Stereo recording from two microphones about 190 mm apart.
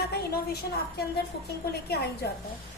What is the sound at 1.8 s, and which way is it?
Speech, 55° left (ahead or behind).